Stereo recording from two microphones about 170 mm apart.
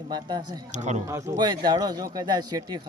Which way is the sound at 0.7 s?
45° right (ahead or behind).